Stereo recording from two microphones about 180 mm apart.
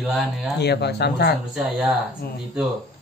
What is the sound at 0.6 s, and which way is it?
Speech, 65° left (ahead or behind).